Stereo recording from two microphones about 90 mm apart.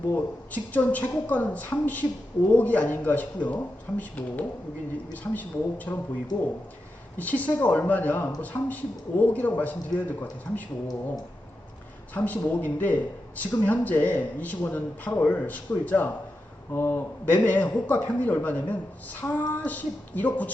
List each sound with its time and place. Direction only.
0.1 s a man's voice: 20° left (ahead or behind)
7.2 s a man's voice: 20° left (ahead or behind)
12.1 s a man's voice: 20° left (ahead or behind)